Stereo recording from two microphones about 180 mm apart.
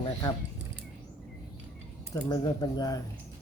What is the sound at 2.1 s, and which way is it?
Speech, 25° left (ahead or behind).